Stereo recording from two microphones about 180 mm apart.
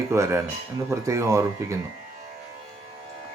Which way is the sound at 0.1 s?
15° right (ahead or behind).